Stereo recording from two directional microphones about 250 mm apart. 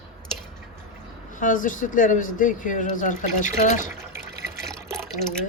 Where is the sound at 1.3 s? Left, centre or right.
Left.